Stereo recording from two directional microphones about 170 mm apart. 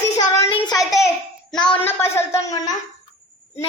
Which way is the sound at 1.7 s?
15° left (ahead or behind).